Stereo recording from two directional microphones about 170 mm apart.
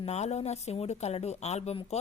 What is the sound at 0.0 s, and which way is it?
Speech, 40° left (ahead or behind).